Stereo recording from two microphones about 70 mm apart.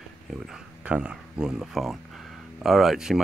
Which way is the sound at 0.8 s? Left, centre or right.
Centre.